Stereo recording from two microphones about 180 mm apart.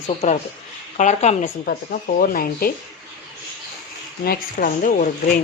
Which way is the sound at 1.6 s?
55° left (ahead or behind).